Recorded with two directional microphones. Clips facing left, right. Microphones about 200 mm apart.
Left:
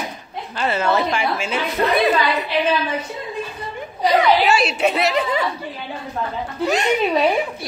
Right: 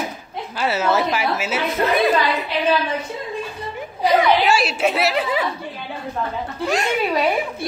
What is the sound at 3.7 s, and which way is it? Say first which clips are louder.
A woman's voice: even; 5° right (ahead or behind).